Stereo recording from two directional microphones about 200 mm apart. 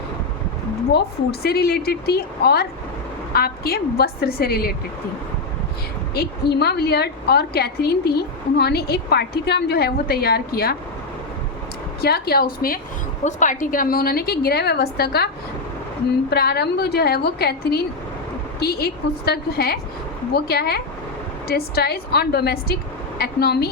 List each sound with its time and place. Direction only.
0.9 s a woman's voice: 50° left (ahead or behind)
6.1 s a woman's voice: 55° left (ahead or behind)
12.0 s a woman's voice: 55° left (ahead or behind)
16.3 s a woman's voice: 55° left (ahead or behind)